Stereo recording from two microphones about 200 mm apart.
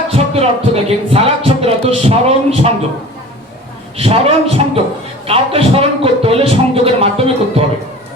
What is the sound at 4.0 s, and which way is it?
A man's voice, 30° right (ahead or behind).